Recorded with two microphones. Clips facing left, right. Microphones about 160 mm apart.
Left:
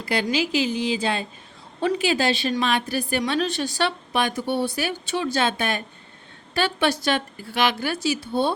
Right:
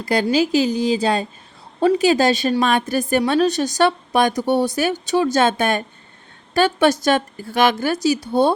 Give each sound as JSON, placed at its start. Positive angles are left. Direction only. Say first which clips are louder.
{"t": 0.0, "sound": "a woman's voice", "louder": "right 6 dB", "side_deg": -40}